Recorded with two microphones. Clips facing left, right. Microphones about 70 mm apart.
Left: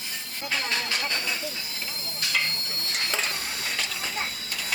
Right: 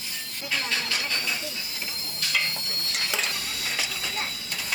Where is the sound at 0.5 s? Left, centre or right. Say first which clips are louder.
Even; left.